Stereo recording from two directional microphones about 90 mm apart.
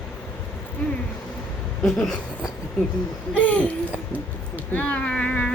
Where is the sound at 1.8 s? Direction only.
Centre (ahead or behind).